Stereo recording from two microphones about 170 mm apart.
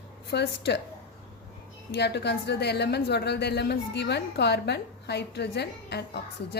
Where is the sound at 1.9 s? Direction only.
80° left.